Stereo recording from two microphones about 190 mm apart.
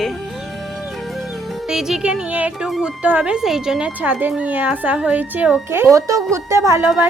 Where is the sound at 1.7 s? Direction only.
5° right (ahead or behind).